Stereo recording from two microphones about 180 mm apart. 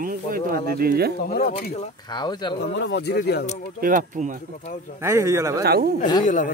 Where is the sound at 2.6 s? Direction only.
75° left (ahead or behind).